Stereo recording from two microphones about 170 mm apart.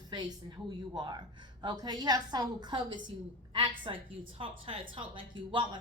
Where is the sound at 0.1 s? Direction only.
25° right (ahead or behind).